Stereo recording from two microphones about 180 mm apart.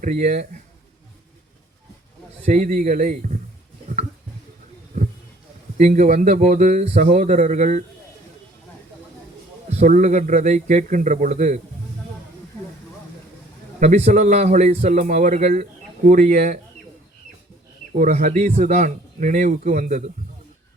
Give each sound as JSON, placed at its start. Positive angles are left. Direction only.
{"t": 0.0, "sound": "a man's voice", "side_deg": -45}
{"t": 2.5, "sound": "a man's voice", "side_deg": -40}
{"t": 5.7, "sound": "a man's voice", "side_deg": -45}
{"t": 9.6, "sound": "speech", "side_deg": -40}
{"t": 13.7, "sound": "a man's voice", "side_deg": -40}
{"t": 17.9, "sound": "a man's voice", "side_deg": -45}